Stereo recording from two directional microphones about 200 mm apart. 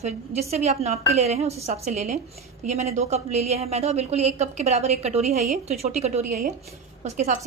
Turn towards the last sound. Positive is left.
turn(degrees=-35)  # may be behind; listen again after turning